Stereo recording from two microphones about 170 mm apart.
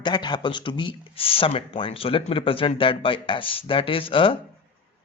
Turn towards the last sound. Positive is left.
turn(degrees=30)  # may be behind; listen again after turning